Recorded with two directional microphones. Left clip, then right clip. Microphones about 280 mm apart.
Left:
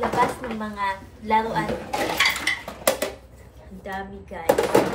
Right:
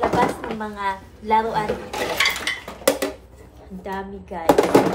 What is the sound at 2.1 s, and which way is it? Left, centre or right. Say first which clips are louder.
Dishes: right 1 dB; centre.